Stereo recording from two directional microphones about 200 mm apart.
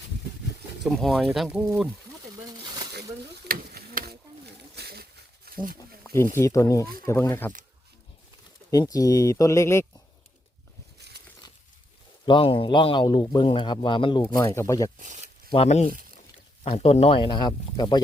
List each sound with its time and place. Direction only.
0.9 s speech: centre (ahead or behind)
3.5 s stir: 50° right (ahead or behind)
4.7 s a sound: 50° right (ahead or behind)
6.3 s speech: 15° left (ahead or behind)
8.7 s speech: 20° left (ahead or behind)
12.2 s a man's voice: 25° left (ahead or behind)
14.9 s zipper: 40° right (ahead or behind)
15.5 s a man's voice: 35° left (ahead or behind)